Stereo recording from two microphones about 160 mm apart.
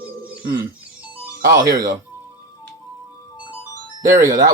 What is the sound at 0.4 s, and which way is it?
Music, 20° right (ahead or behind).